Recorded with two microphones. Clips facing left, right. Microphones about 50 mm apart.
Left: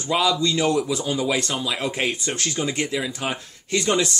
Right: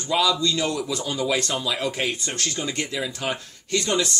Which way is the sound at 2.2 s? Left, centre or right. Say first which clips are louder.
Left 3 dB; centre.